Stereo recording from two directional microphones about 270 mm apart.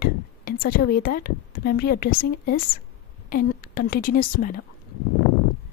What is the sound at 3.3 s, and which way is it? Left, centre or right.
A woman's voice, left.